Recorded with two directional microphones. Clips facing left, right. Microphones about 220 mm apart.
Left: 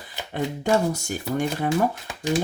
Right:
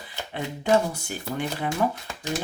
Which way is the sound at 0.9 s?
45° left (ahead or behind).